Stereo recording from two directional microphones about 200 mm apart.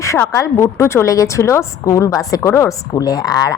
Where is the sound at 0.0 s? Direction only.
15° left (ahead or behind).